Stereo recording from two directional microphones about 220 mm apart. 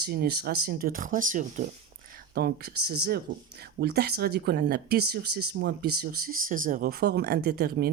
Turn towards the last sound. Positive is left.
turn(degrees=-45)  # may be behind; listen again after turning